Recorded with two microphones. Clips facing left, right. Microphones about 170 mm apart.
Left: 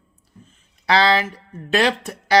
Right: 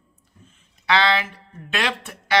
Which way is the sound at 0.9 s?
35° left (ahead or behind).